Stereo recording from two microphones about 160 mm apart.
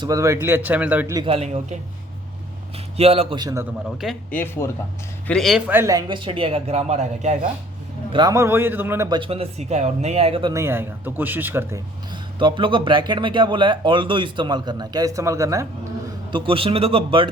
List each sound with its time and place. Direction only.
0.0 s speech: 20° right (ahead or behind)
1.1 s a man's voice: 35° right (ahead or behind)
3.0 s a man's voice: 40° right (ahead or behind); by 3.7 s 20° right (ahead or behind)
3.8 s speech: centre (ahead or behind)
4.3 s speech: 15° left (ahead or behind)
5.3 s a man's voice: centre (ahead or behind); by 7.3 s 45° right (ahead or behind)
8.1 s speech: 25° right (ahead or behind)
9.0 s a man's voice: 30° right (ahead or behind)
10.5 s speech: 15° right (ahead or behind)
12.1 s speech: 30° right (ahead or behind)
16.3 s a man's voice: 35° right (ahead or behind)